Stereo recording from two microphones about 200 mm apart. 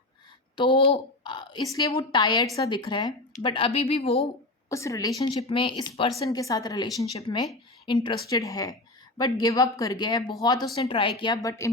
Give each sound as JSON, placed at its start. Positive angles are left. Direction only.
{"t": 0.5, "sound": "a child's voice", "side_deg": 25}
{"t": 4.7, "sound": "a woman's voice", "side_deg": 15}